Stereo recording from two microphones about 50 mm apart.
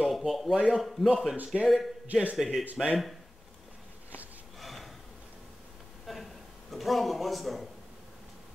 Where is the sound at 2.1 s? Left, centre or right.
Right.